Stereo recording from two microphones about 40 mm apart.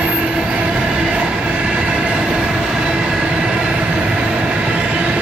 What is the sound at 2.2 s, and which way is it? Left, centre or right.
Train, centre.